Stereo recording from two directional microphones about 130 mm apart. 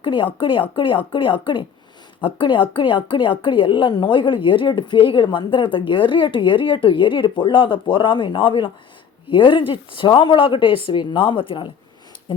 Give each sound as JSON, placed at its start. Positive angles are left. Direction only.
{"t": 0.0, "sound": "a woman's voice", "side_deg": 40}